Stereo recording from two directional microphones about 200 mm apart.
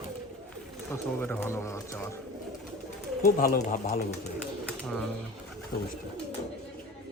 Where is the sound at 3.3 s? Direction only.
45° left (ahead or behind).